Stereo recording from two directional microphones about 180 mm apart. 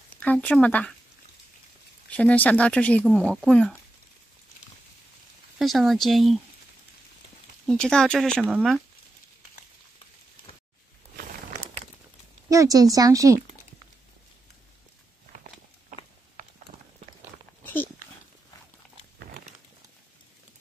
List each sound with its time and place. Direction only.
0.2 s speech: 10° left (ahead or behind)
2.0 s speech: 5° left (ahead or behind)
5.6 s speech: centre (ahead or behind)
7.6 s speech: 5° left (ahead or behind)
11.1 s a sound: 40° right (ahead or behind)
12.4 s speech: 20° right (ahead or behind)